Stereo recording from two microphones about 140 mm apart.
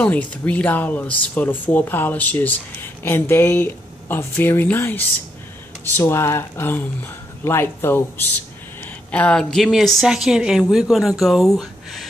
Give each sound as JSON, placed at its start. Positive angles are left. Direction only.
{"t": 0.3, "sound": "a woman's voice", "side_deg": 10}